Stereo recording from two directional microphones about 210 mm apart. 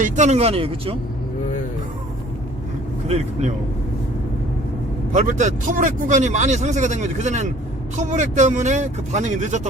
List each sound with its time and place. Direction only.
0.0 s speech: 35° right (ahead or behind)
3.1 s speech: 30° right (ahead or behind)
5.1 s speech: 35° right (ahead or behind)